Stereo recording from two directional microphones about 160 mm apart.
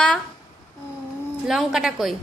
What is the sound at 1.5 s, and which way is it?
Speech, centre (ahead or behind).